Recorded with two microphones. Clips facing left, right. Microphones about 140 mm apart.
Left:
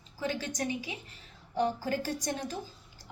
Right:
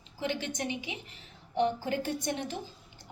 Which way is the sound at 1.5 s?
25° right (ahead or behind).